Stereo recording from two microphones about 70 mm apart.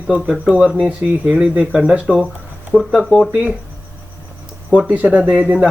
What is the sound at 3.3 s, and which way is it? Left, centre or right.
Speech, right.